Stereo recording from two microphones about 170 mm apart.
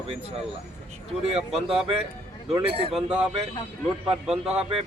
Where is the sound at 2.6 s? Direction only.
30° right (ahead or behind).